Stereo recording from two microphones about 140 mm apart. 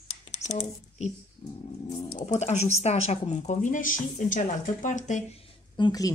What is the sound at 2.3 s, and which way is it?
A woman's voice, 55° left (ahead or behind).